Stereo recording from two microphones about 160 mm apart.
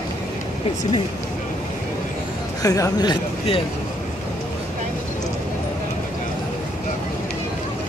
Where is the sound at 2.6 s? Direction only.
20° left (ahead or behind).